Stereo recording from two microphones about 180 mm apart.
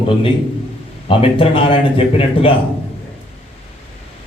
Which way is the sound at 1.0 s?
30° left (ahead or behind).